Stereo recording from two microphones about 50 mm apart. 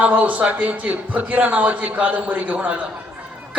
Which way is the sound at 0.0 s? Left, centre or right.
Right.